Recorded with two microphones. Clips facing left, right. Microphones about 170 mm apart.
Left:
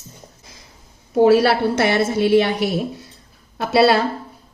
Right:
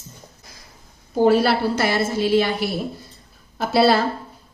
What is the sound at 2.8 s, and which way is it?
A woman's voice, 75° left (ahead or behind).